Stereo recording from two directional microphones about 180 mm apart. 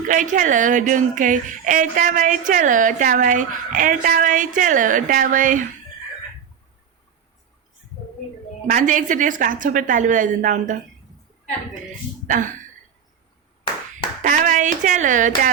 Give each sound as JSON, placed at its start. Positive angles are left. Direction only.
{"t": 0.1, "sound": "speech", "side_deg": -45}
{"t": 8.6, "sound": "speech", "side_deg": -45}
{"t": 12.3, "sound": "speech", "side_deg": -45}
{"t": 14.2, "sound": "speech", "side_deg": -45}